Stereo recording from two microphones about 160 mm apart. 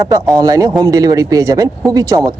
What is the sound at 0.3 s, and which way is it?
A man's voice, 20° right (ahead or behind).